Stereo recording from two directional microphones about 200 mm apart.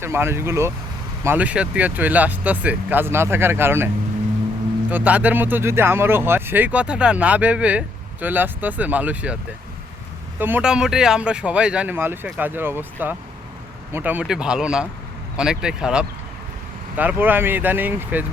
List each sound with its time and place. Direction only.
0.0 s speech: 10° right (ahead or behind)
4.9 s speech: 10° right (ahead or behind)